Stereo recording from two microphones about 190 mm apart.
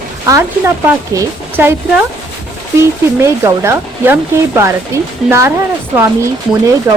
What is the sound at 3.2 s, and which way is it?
Speech, 15° right (ahead or behind).